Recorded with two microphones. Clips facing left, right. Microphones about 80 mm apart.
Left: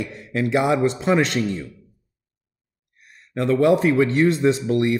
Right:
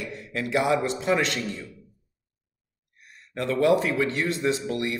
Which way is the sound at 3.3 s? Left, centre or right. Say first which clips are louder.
Left 4 dB; left.